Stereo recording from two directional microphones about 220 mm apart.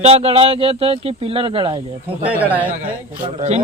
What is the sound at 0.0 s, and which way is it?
A man's voice, 30° right (ahead or behind).